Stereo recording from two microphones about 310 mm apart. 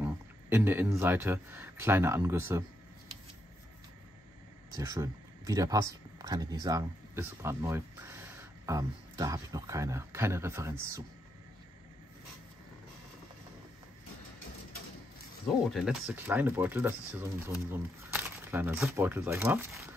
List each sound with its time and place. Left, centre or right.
0.0 s speech: centre
4.7 s speech: centre
15.6 s speech: centre